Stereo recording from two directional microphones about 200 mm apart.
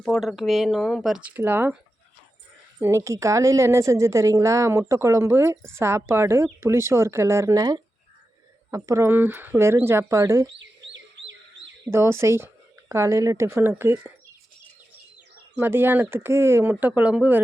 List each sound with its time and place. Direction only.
0.0 s speech: centre (ahead or behind)
2.8 s a woman's voice: 15° right (ahead or behind)
10.9 s bird: 65° right (ahead or behind)
11.9 s a woman's voice: 10° right (ahead or behind)
15.5 s a woman's voice: 10° right (ahead or behind)